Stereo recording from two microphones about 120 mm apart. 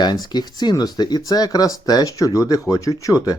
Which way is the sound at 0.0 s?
35° left (ahead or behind).